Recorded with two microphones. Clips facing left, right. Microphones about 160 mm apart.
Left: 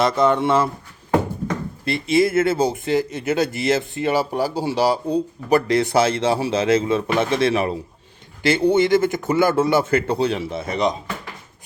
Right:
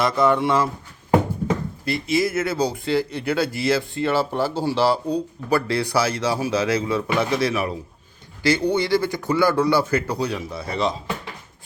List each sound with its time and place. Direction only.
0.0 s speech: 20° left (ahead or behind)
1.8 s speech: 25° left (ahead or behind)